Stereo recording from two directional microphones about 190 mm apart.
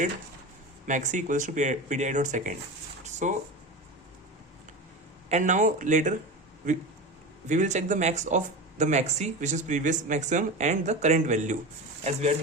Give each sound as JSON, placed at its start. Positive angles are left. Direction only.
{"t": 0.9, "sound": "speech", "side_deg": -40}
{"t": 3.0, "sound": "a sound", "side_deg": -40}
{"t": 5.3, "sound": "speech", "side_deg": -40}
{"t": 7.4, "sound": "speech", "side_deg": -40}